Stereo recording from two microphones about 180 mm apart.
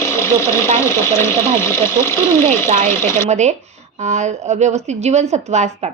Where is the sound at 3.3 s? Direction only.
40° right (ahead or behind).